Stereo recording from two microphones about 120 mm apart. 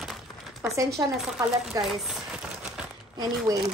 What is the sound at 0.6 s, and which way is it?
Speech, 25° right (ahead or behind).